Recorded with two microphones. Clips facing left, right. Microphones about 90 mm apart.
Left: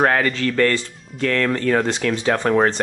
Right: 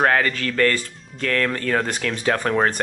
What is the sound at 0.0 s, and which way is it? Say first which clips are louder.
Speech: left 1 dB; 10° left (ahead or behind).